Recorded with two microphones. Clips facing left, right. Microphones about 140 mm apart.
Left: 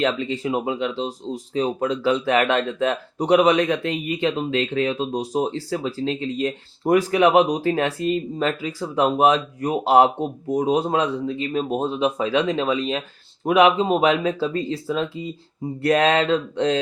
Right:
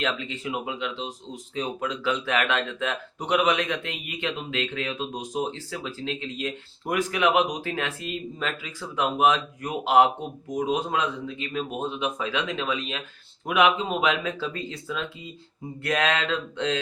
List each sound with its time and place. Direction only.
0.0 s speech: 35° left (ahead or behind)